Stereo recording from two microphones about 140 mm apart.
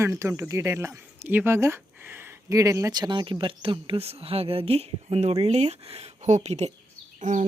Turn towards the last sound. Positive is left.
turn(degrees=-60)  # may be behind; listen again after turning